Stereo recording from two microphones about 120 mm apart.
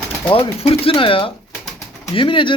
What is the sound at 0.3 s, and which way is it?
Speech, 45° left (ahead or behind).